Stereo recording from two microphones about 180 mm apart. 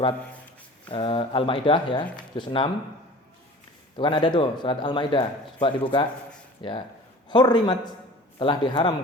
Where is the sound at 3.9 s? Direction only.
25° left (ahead or behind).